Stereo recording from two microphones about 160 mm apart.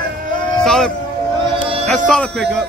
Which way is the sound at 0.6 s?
5° left (ahead or behind).